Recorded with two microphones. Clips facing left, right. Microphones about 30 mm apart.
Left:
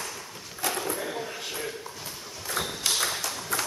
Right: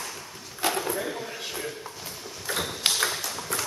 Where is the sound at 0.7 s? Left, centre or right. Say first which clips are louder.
Right 2 dB; centre.